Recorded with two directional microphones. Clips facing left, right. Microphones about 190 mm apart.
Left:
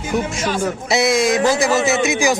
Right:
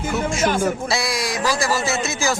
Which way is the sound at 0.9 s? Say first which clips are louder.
Left 8 dB; 25° left (ahead or behind).